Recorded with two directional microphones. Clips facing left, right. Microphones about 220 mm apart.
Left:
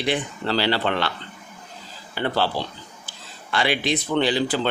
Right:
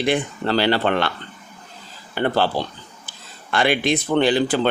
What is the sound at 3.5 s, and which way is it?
Speech, 50° right (ahead or behind).